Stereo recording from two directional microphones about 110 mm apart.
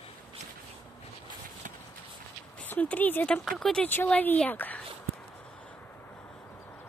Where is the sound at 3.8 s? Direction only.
15° left (ahead or behind).